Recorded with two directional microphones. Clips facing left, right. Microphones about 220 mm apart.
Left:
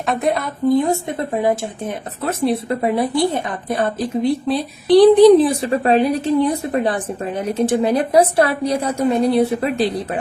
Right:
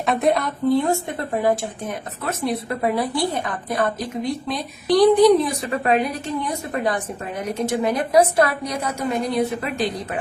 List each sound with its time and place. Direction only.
0.0 s a woman's voice: centre (ahead or behind)
0.7 s speech: 15° left (ahead or behind); by 10.2 s 35° left (ahead or behind)